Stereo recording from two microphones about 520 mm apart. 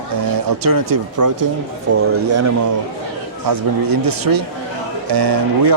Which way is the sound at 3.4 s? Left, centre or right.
Right.